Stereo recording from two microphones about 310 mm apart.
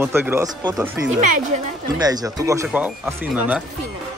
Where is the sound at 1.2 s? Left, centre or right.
Right.